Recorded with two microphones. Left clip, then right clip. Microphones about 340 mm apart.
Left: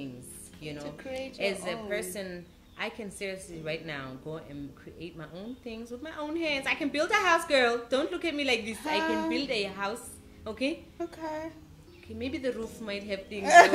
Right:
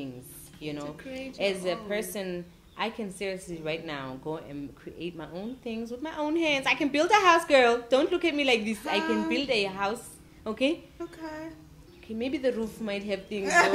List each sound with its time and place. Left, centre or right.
0.6 s a woman's voice: right
0.9 s a woman's voice: left
1.4 s a woman's voice: right
9.0 s a child's voice: left
9.3 s a woman's voice: right
11.0 s a child's voice: left
12.2 s a woman's voice: right
13.4 s a child's voice: left